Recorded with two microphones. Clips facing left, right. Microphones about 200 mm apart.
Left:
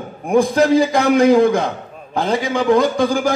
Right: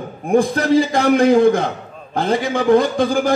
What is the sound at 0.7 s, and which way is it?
A man's voice, 55° right (ahead or behind).